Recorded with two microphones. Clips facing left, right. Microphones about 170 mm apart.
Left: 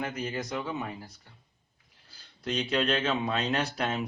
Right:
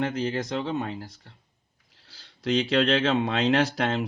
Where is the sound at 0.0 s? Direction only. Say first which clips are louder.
Right 6 dB; 80° right.